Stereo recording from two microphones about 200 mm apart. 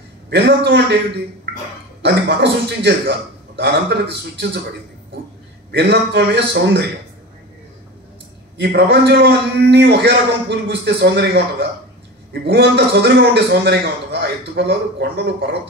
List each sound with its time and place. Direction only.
0.3 s a man's voice: 55° right (ahead or behind)
2.0 s a man's voice: 60° right (ahead or behind)
5.7 s a man's voice: 60° right (ahead or behind)
8.5 s a man's voice: 55° right (ahead or behind)